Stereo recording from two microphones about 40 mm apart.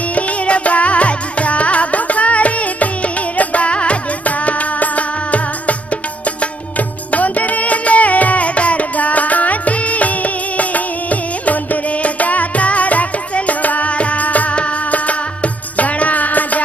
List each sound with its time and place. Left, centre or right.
0.1 s music: left